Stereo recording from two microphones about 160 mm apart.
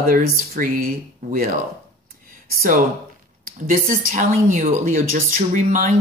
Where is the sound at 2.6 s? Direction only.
60° right (ahead or behind).